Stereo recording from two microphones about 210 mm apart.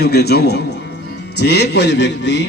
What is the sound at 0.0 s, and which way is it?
Speech, 50° left (ahead or behind).